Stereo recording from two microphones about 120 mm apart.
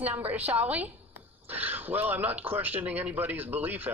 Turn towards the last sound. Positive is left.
turn(degrees=-15)  # may be behind; listen again after turning